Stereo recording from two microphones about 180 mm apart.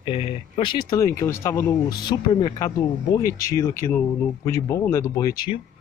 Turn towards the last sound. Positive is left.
turn(degrees=20)  # may be behind; listen again after turning